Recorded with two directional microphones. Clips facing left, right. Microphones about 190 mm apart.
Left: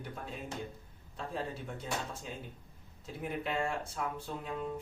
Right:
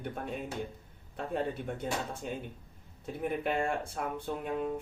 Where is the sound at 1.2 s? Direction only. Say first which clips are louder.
Right 5 dB; 60° right (ahead or behind).